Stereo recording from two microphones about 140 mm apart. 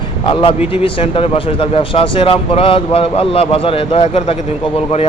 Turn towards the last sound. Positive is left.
turn(degrees=45)  # may be behind; listen again after turning